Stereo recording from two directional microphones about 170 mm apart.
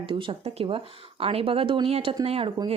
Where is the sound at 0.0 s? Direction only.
30° right (ahead or behind).